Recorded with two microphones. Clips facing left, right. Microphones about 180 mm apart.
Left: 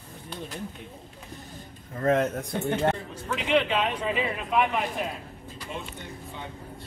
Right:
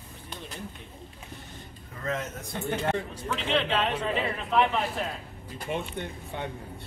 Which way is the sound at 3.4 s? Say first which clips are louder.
Left 3 dB; 10° left (ahead or behind).